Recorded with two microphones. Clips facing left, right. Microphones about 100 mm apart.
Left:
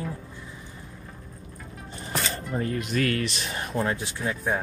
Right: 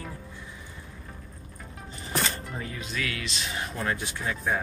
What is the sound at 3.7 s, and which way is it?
Speech, 25° left (ahead or behind).